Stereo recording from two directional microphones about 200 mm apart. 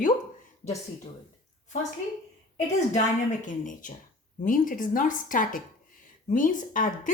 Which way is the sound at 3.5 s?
40° left (ahead or behind).